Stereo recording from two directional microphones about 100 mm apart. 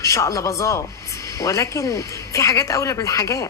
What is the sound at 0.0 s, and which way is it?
Speech, 30° left (ahead or behind).